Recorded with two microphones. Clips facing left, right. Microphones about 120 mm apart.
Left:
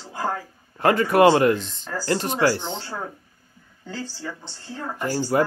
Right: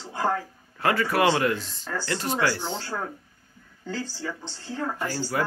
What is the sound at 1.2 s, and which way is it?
Speech, 35° left (ahead or behind).